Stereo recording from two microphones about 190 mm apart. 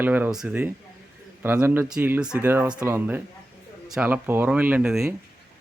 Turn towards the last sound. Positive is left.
turn(degrees=-5)  # may be behind; listen again after turning